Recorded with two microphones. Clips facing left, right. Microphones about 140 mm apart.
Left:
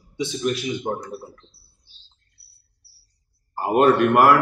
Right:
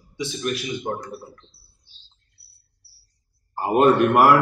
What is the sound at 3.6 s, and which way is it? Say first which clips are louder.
Speech: even; centre (ahead or behind).